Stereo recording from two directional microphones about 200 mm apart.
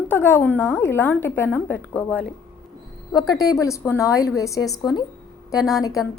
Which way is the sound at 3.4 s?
15° left (ahead or behind).